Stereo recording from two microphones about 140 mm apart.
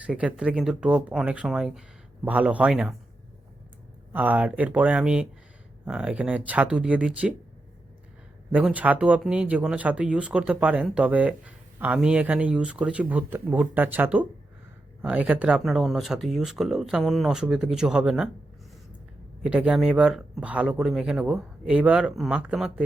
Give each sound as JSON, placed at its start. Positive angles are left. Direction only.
{"t": 0.0, "sound": "speech", "side_deg": -10}
{"t": 4.1, "sound": "speech", "side_deg": -10}
{"t": 8.5, "sound": "speech", "side_deg": -10}
{"t": 19.4, "sound": "speech", "side_deg": -10}